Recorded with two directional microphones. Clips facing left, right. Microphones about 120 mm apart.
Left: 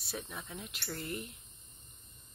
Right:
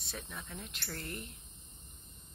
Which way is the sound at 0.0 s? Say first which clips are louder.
Left 3 dB; 10° left (ahead or behind).